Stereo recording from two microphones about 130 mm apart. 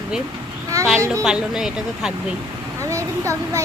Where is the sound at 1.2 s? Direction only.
5° right (ahead or behind).